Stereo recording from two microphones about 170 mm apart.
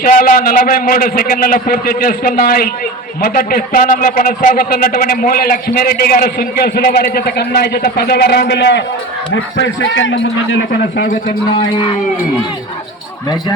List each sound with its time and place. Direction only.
0.0 s a man's voice: 60° left (ahead or behind); by 10.2 s 90° left
10.6 s a man's voice: 75° left (ahead or behind)